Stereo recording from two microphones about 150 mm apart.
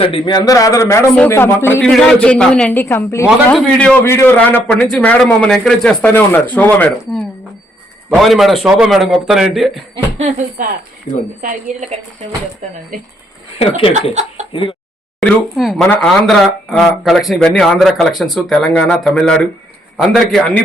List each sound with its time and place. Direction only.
0.0 s a man's voice: 35° left (ahead or behind); by 1.9 s 15° left (ahead or behind)
1.9 s a man's voice: 5° left (ahead or behind)
3.2 s speech: 5° left (ahead or behind)
4.0 s a man's voice: 15° left (ahead or behind)
8.1 s speech: centre (ahead or behind)
9.9 s speech: 45° right (ahead or behind)
11.3 s a woman's voice: 55° right (ahead or behind)
13.6 s speech: 40° left (ahead or behind)
14.1 s speech: 50° right (ahead or behind)
14.5 s speech: 35° left (ahead or behind)
15.9 s speech: centre (ahead or behind)